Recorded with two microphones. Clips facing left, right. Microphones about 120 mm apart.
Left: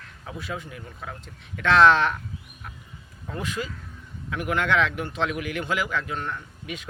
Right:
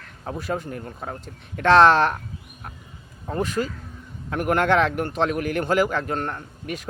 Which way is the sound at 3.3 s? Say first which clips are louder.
Right 6 dB; 35° right (ahead or behind).